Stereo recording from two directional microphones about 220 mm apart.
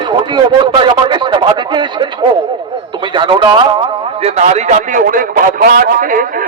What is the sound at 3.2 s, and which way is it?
A man's voice, 20° right (ahead or behind).